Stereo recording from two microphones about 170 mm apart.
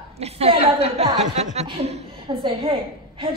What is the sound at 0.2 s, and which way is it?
A woman's voice, 35° right (ahead or behind).